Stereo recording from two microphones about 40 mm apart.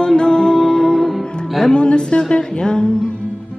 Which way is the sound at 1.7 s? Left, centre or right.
Left.